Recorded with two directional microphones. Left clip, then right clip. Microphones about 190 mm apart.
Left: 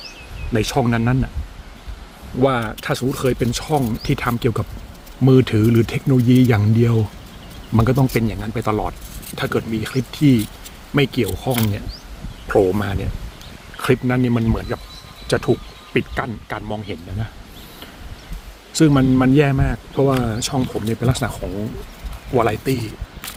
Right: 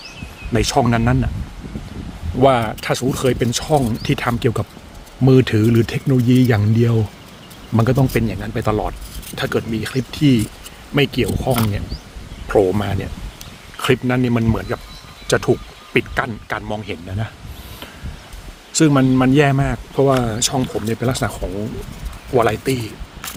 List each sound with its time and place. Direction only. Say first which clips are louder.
0.5 s speech: right 3 dB; 20° right (ahead or behind)
2.4 s speech: right 4 dB; 20° right (ahead or behind)
18.7 s speech: right 1 dB; 15° right (ahead or behind)
22.4 s speech: right 2 dB; 20° right (ahead or behind)